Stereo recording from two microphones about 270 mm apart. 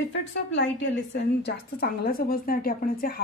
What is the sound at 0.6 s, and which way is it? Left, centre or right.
A woman's voice, left.